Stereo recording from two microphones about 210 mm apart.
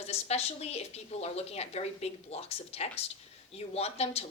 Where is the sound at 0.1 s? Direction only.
30° left (ahead or behind).